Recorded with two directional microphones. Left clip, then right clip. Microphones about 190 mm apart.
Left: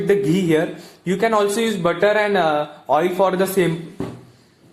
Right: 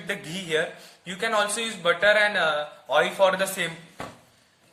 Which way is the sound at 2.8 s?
30° right (ahead or behind).